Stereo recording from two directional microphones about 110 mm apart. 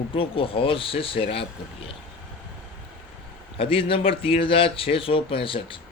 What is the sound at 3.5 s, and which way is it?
Speech, 55° left (ahead or behind).